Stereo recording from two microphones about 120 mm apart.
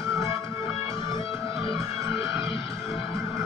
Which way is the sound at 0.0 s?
25° right (ahead or behind).